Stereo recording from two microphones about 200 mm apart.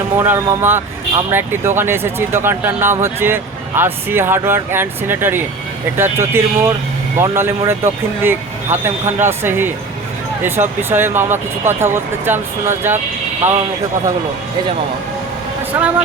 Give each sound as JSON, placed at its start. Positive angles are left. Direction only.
{"t": 0.2, "sound": "speech", "side_deg": -10}
{"t": 15.7, "sound": "speech", "side_deg": -10}